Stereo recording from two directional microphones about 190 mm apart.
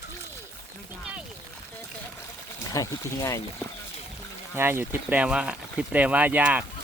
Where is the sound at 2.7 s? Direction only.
15° left (ahead or behind).